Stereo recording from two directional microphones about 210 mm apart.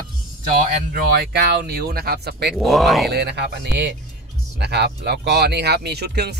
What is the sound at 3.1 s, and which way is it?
Speech, 50° right (ahead or behind).